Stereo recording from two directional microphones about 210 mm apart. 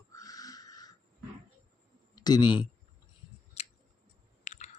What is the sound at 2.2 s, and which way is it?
Speech, 20° left (ahead or behind).